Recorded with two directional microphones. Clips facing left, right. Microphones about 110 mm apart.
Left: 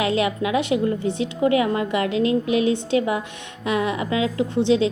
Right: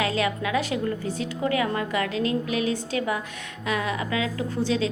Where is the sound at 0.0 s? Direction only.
25° left (ahead or behind).